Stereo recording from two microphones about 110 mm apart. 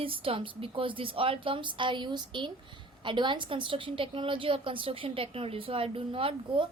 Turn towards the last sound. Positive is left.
turn(degrees=-55)  # may be behind; listen again after turning